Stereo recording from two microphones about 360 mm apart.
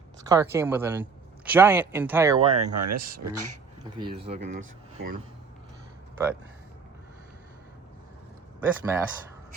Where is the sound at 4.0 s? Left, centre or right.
Centre.